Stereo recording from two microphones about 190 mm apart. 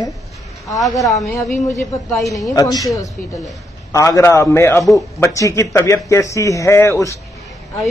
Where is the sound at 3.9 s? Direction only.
15° left (ahead or behind).